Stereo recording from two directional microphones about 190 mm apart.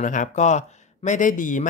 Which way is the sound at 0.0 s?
40° left (ahead or behind).